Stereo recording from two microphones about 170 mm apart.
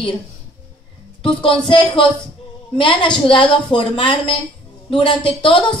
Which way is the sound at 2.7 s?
30° left (ahead or behind).